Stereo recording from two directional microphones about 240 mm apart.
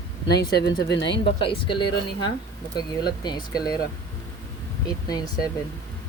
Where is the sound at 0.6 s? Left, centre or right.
Left.